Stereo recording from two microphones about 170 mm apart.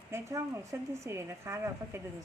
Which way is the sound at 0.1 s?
15° right (ahead or behind).